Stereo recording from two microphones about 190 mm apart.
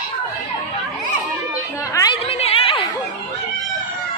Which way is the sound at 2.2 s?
30° left (ahead or behind).